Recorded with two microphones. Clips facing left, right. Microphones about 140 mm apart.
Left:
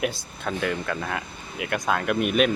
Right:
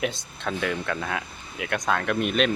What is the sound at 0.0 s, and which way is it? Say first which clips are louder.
Speech: left 1 dB; 5° left (ahead or behind).